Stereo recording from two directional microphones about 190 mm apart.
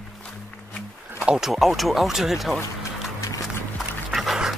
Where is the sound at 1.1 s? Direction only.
5° right (ahead or behind).